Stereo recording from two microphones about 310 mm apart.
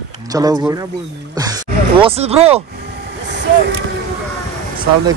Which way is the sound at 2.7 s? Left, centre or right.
Right.